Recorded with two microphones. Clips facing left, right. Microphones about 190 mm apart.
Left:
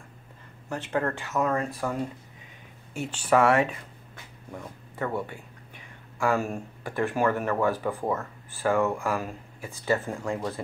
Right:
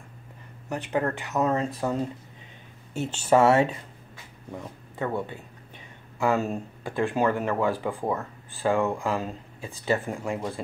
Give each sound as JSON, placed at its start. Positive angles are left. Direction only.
{"t": 0.7, "sound": "speech", "side_deg": -15}
{"t": 4.5, "sound": "speech", "side_deg": -15}